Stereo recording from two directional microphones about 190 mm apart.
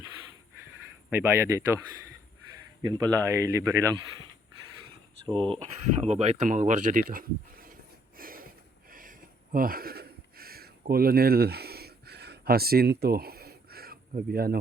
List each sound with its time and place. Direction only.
1.1 s speech: 15° right (ahead or behind)
3.0 s speech: 20° right (ahead or behind)
5.2 s speech: 25° right (ahead or behind)
6.0 s a sound: 35° right (ahead or behind); by 14.6 s 50° right (ahead or behind)